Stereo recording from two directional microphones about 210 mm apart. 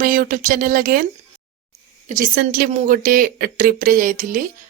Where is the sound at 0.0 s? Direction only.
40° right (ahead or behind).